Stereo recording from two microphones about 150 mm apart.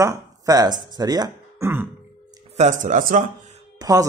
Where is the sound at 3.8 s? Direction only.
20° right (ahead or behind).